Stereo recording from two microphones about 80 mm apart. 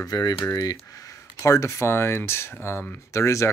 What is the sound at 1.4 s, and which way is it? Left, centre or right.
Speech, left.